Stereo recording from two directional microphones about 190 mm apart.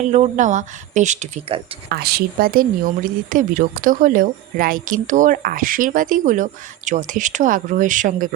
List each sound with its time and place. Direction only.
0.3 s a woman's voice: 40° right (ahead or behind)
1.9 s speech: 55° right (ahead or behind)